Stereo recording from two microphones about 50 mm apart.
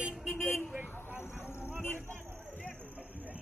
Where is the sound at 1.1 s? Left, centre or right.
Left.